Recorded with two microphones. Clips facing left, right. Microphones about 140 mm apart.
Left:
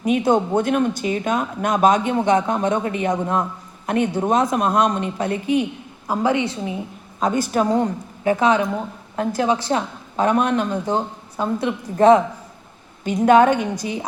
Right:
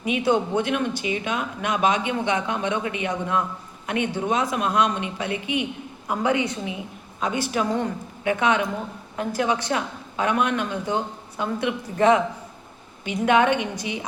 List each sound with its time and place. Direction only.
0.0 s a man's voice: 45° left (ahead or behind)
6.1 s speech: 30° left (ahead or behind)
7.2 s speech: 45° left (ahead or behind)